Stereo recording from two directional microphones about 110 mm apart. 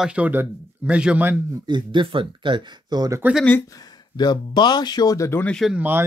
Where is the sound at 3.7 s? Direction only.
40° left (ahead or behind).